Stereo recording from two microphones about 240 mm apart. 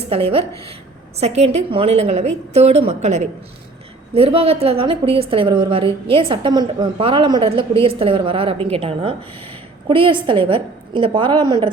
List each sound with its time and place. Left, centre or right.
0.1 s a woman's voice: right